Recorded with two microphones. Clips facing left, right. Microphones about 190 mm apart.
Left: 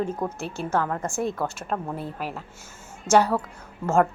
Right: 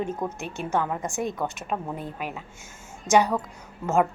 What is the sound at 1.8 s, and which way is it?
Speech, 5° left (ahead or behind).